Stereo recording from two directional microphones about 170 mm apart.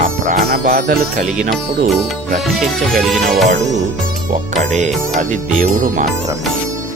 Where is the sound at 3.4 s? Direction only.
45° right (ahead or behind).